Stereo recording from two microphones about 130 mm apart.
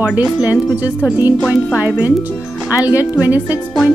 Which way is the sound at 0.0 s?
10° right (ahead or behind).